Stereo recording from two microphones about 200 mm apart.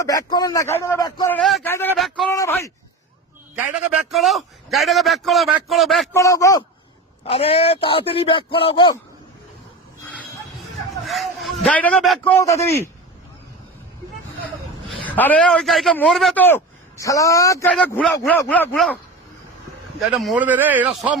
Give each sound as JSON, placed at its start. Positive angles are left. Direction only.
{"t": 0.0, "sound": "speech", "side_deg": 20}
{"t": 1.4, "sound": "a man's voice", "side_deg": 0}
{"t": 2.3, "sound": "speech", "side_deg": 15}
{"t": 4.1, "sound": "a man's voice", "side_deg": 0}
{"t": 6.1, "sound": "speech", "side_deg": 15}
{"t": 7.3, "sound": "a man's voice", "side_deg": 30}
{"t": 11.0, "sound": "a man's voice", "side_deg": 0}
{"t": 12.3, "sound": "speech", "side_deg": 15}
{"t": 15.0, "sound": "a man's voice", "side_deg": 10}
{"t": 20.0, "sound": "speech", "side_deg": 0}